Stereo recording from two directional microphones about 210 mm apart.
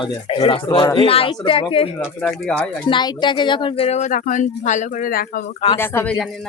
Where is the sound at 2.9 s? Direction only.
20° left (ahead or behind); by 5.5 s 45° left (ahead or behind).